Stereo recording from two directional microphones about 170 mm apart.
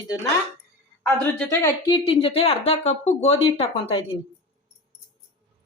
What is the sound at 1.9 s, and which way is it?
Speech, 35° left (ahead or behind).